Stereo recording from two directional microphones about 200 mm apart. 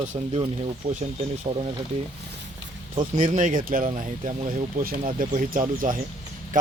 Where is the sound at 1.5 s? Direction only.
40° right (ahead or behind).